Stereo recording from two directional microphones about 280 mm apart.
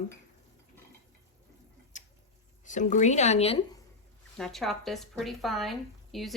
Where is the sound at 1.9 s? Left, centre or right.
Left.